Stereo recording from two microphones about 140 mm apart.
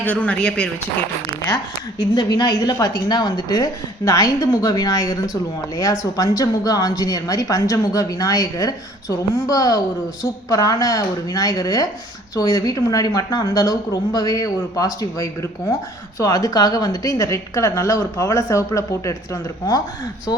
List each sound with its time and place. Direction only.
0.0 s speech: 10° left (ahead or behind)
2.0 s a woman's voice: 30° left (ahead or behind)